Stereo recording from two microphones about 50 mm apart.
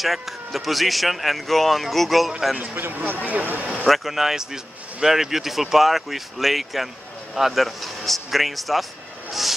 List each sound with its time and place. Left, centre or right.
0.0 s speech: centre
2.7 s speech: right
3.8 s speech: centre